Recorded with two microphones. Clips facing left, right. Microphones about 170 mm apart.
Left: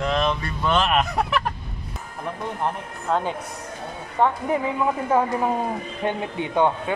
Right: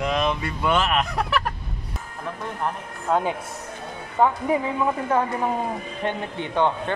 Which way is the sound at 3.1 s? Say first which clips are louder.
Right 1 dB; 5° right (ahead or behind).